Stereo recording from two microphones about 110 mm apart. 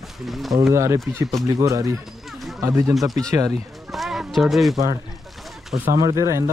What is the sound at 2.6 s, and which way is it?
Speech, 30° right (ahead or behind).